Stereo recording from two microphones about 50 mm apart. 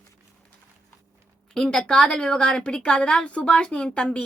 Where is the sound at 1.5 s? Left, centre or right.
Centre.